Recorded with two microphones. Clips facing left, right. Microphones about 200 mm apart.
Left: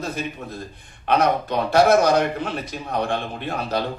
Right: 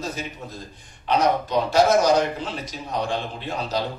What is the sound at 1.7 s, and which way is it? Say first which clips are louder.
A man's voice: left 2 dB; 60° left (ahead or behind).